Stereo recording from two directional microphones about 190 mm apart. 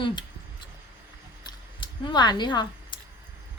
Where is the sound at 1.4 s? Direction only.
25° left (ahead or behind).